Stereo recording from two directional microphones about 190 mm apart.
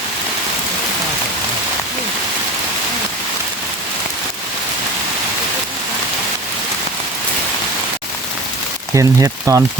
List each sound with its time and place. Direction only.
9.0 s speech: 15° right (ahead or behind)